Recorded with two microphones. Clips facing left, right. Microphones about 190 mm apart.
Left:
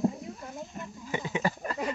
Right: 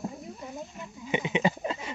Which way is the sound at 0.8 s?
20° right (ahead or behind).